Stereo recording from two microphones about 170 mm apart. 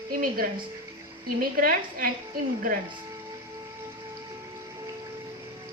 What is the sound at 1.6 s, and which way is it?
Speech, 55° right (ahead or behind).